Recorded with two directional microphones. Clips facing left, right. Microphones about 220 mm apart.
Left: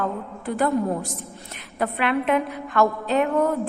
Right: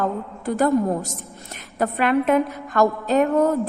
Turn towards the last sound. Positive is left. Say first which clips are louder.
# right 3 dB
turn(degrees=-45)  # may be behind; listen again after turning